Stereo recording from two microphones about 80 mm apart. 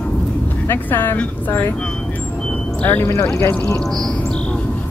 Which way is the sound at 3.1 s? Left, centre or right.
Left.